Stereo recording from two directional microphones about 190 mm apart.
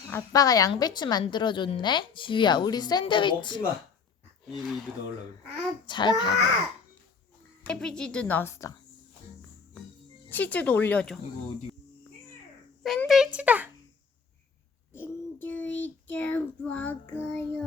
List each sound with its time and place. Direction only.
0.1 s a woman's voice: 20° left (ahead or behind)
5.8 s a woman's voice: 25° left (ahead or behind)
7.6 s child singing: 5° left (ahead or behind)
10.2 s child singing: 10° left (ahead or behind)
12.8 s a child's voice: centre (ahead or behind)
14.9 s child singing: 10° left (ahead or behind)